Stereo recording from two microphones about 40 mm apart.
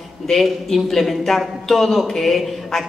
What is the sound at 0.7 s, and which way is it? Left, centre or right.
Speech, centre.